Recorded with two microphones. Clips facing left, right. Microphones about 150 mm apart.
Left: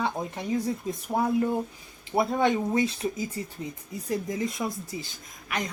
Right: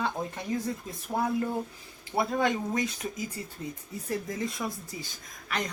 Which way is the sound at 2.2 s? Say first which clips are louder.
Left 3 dB; 25° left (ahead or behind).